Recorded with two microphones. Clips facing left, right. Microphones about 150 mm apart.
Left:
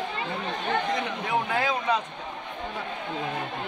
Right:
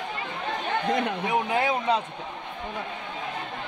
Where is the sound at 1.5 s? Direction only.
25° right (ahead or behind).